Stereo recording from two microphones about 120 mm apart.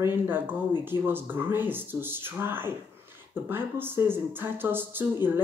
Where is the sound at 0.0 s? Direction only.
15° right (ahead or behind).